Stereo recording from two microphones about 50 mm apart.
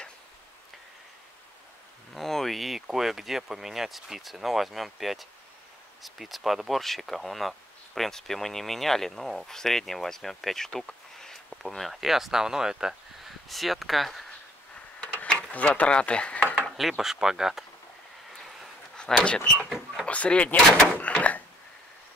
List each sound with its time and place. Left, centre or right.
2.1 s speech: centre
13.5 s speech: centre
15.5 s speech: left
16.7 s speech: centre
18.9 s speech: centre